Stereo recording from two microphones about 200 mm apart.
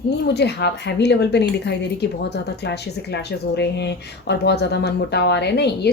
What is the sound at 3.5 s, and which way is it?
Speech, 55° left (ahead or behind).